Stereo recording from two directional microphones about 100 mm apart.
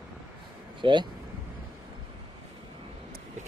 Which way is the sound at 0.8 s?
55° right (ahead or behind).